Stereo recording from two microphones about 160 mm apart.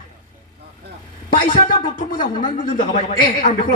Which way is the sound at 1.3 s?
60° left (ahead or behind).